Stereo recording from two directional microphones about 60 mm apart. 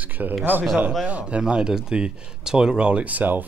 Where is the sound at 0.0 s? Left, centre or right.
Right.